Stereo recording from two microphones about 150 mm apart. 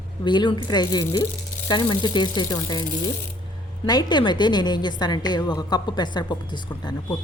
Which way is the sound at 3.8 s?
25° left (ahead or behind).